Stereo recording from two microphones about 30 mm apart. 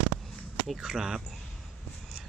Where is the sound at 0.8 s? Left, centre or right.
Centre.